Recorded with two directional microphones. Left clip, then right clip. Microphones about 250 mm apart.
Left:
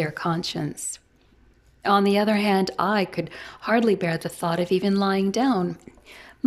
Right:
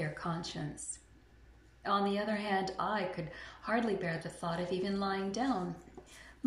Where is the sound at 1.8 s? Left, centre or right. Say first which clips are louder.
Left 13 dB; left.